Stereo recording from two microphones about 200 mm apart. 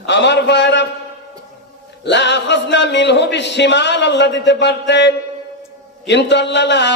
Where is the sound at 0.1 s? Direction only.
60° left (ahead or behind).